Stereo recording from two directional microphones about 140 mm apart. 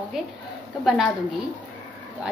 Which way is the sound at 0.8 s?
Centre (ahead or behind).